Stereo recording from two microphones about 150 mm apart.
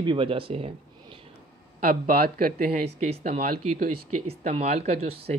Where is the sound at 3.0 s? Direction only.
50° right (ahead or behind).